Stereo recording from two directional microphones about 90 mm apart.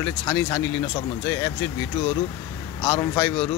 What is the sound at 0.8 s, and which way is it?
Speech, 35° left (ahead or behind).